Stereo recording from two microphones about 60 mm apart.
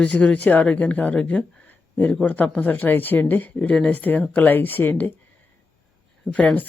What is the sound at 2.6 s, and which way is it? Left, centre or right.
Speech, left.